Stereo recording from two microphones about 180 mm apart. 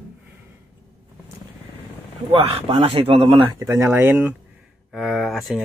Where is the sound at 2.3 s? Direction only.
30° right (ahead or behind).